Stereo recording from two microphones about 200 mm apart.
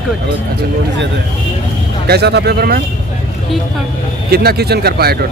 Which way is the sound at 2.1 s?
55° right (ahead or behind).